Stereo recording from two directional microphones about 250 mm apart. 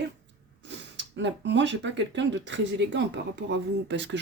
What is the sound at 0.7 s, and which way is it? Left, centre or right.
Speech, right.